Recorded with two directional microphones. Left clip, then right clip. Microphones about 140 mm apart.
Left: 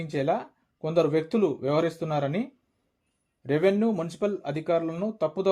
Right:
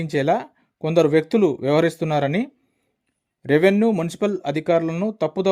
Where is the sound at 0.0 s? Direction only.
40° right (ahead or behind).